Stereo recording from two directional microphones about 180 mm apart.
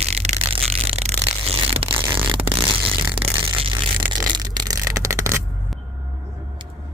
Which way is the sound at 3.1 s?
30° right (ahead or behind).